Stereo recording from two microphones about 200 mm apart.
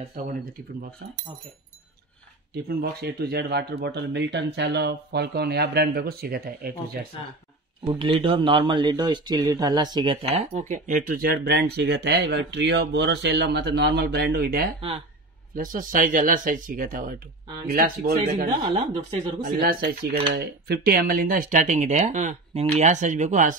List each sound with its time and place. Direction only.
0.2 s speech: 45° right (ahead or behind)
1.0 s speech: 55° right (ahead or behind)
2.8 s speech: 50° right (ahead or behind)
7.8 s speech: 25° right (ahead or behind); by 18.1 s 45° right (ahead or behind)
18.6 s speech: 25° right (ahead or behind)
19.4 s speech: 50° right (ahead or behind)